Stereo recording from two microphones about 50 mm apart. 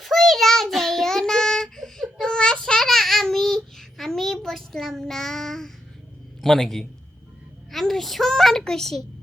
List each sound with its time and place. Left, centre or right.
0.0 s child singing: centre
6.4 s a man's voice: centre
7.7 s a sound: centre